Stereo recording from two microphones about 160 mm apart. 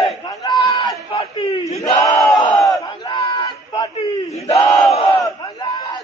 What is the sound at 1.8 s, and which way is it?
Battle cry, 20° left (ahead or behind).